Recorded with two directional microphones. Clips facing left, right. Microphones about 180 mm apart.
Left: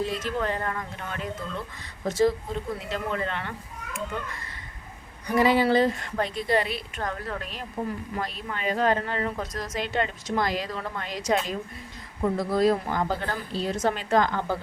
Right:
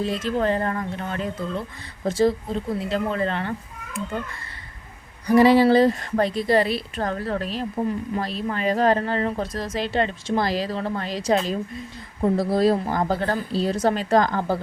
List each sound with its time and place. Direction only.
0.0 s a woman's voice: 30° right (ahead or behind)
5.3 s a woman's voice: 35° right (ahead or behind)